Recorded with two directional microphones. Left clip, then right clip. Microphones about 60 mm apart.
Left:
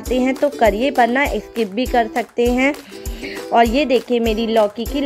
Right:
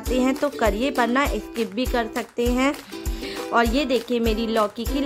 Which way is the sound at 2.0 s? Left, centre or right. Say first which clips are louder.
Left 9 dB; left.